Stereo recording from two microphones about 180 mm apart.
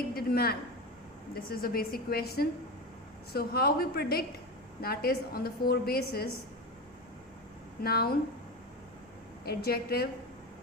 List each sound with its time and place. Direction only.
0.1 s a sound: 55° left (ahead or behind)
1.3 s a woman's voice: 55° left (ahead or behind)
7.8 s a woman's voice: 60° left (ahead or behind)
9.5 s a woman's voice: 60° left (ahead or behind)